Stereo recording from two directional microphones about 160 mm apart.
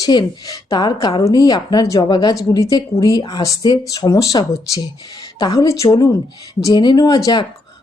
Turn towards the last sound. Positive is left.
turn(degrees=25)  # may be behind; listen again after turning